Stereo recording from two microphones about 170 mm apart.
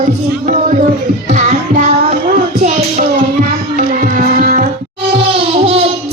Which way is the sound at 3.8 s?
50° right (ahead or behind).